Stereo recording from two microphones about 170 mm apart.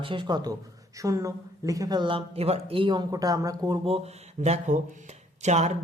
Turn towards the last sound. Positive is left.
turn(degrees=-40)  # may be behind; listen again after turning